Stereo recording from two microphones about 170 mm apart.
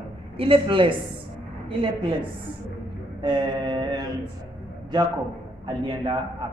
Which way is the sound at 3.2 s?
25° right (ahead or behind).